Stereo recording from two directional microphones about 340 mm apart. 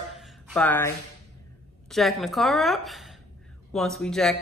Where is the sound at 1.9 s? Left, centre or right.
Centre.